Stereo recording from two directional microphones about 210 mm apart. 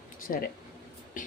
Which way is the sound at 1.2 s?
40° left (ahead or behind).